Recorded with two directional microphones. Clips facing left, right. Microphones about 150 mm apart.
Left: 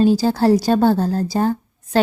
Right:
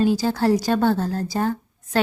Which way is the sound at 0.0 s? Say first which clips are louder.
Left 4 dB; 30° left (ahead or behind).